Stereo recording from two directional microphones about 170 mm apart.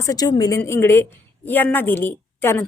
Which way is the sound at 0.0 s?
20° left (ahead or behind).